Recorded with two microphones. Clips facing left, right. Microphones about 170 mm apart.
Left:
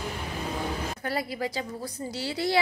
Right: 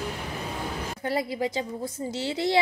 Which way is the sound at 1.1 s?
25° right (ahead or behind).